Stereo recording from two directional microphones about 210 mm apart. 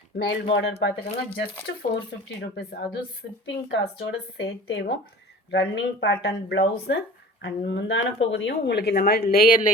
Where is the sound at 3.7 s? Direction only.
60° left (ahead or behind).